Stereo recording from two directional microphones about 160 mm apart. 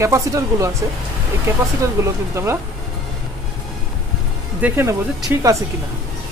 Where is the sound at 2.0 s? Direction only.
20° right (ahead or behind).